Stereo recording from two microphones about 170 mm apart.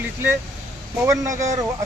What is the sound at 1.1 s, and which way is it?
Speech, 15° right (ahead or behind).